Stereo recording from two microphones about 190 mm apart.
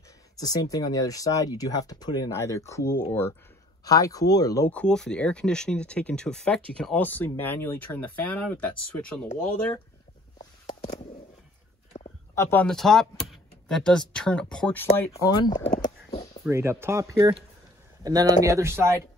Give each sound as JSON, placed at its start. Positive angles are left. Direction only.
{"t": 0.4, "sound": "speech", "side_deg": 20}
{"t": 10.7, "sound": "a sound", "side_deg": 30}
{"t": 12.4, "sound": "speech", "side_deg": 10}
{"t": 15.0, "sound": "speech", "side_deg": 15}
{"t": 16.4, "sound": "speech", "side_deg": -15}